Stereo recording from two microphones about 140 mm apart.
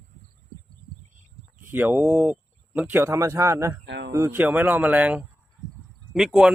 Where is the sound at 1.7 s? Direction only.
15° right (ahead or behind).